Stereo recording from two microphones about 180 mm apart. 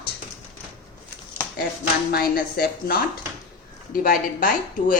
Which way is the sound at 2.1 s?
60° left (ahead or behind).